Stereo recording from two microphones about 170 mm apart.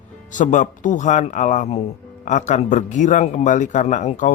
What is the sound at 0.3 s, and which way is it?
Speech, 45° left (ahead or behind).